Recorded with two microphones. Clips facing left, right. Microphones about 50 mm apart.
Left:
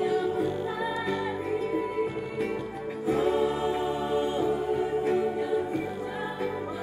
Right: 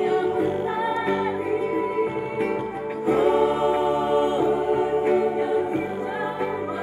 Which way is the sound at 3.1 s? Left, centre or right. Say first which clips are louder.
Right 6 dB; right.